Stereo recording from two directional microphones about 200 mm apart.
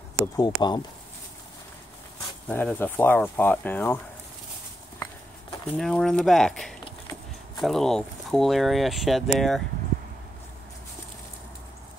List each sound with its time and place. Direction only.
0.4 s speech: 20° left (ahead or behind)
2.4 s speech: 10° left (ahead or behind)
5.7 s speech: centre (ahead or behind)